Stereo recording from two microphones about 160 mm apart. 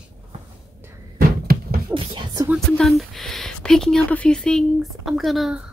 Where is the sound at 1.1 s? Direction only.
70° right (ahead or behind).